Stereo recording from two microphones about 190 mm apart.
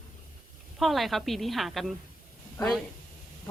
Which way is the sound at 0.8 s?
Centre (ahead or behind).